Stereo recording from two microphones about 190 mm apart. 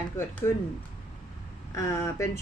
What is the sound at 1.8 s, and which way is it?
Speech, 15° left (ahead or behind).